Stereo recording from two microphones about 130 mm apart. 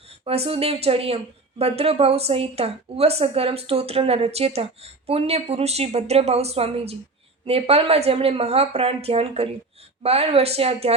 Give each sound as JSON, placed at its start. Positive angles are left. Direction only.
{"t": 0.3, "sound": "speech", "side_deg": -50}